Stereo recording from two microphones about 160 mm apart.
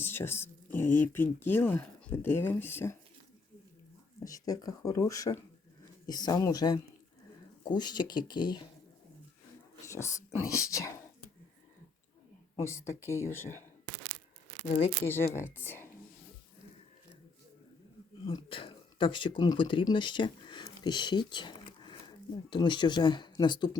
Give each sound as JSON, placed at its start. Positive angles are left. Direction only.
{"t": 0.0, "sound": "a sound", "side_deg": 15}
{"t": 0.7, "sound": "speech", "side_deg": 15}
{"t": 4.2, "sound": "speech", "side_deg": 20}
{"t": 9.8, "sound": "speech", "side_deg": 20}
{"t": 12.5, "sound": "speech", "side_deg": 15}
{"t": 15.0, "sound": "speech", "side_deg": 15}
{"t": 18.3, "sound": "speech", "side_deg": 30}